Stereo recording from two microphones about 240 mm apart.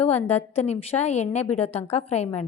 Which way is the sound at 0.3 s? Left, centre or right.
Left.